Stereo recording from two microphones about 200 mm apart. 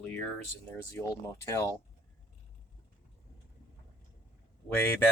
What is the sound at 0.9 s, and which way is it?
Speech, 15° left (ahead or behind).